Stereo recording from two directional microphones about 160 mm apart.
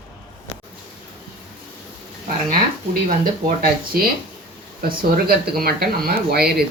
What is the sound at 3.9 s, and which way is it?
Speech, 65° right (ahead or behind).